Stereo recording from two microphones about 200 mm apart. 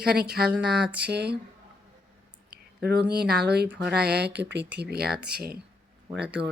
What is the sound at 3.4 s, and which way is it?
Speech, 55° right (ahead or behind).